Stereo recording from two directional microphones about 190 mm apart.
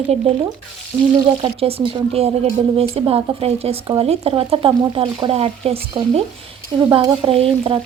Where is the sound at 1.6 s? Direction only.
30° right (ahead or behind).